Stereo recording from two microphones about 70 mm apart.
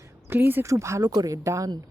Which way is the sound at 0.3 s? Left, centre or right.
Right.